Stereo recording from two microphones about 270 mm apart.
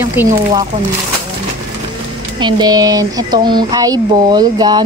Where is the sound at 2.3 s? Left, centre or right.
Centre.